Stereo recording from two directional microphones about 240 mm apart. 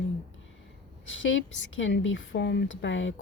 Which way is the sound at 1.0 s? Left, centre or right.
Left.